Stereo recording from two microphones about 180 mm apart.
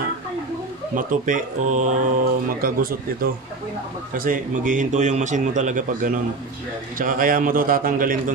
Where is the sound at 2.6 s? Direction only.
55° right (ahead or behind).